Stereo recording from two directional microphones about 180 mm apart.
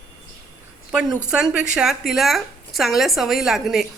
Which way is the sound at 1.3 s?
5° right (ahead or behind).